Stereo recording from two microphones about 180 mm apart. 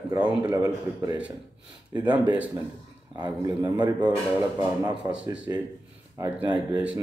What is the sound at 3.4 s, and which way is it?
A man's voice, 25° right (ahead or behind).